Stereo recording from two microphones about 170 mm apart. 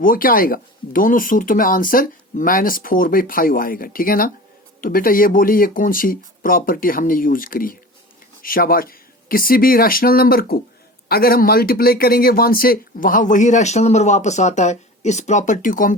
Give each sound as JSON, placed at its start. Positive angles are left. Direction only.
{"t": 0.0, "sound": "speech", "side_deg": 60}